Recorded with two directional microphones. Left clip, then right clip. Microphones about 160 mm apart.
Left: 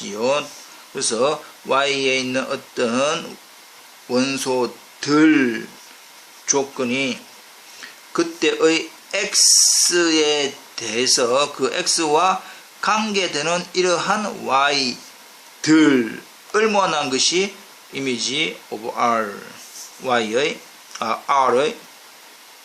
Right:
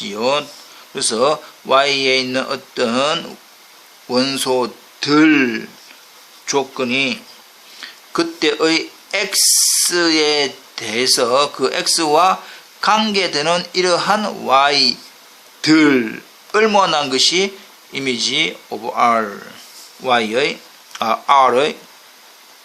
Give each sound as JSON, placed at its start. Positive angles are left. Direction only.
{"t": 0.0, "sound": "speech", "side_deg": -35}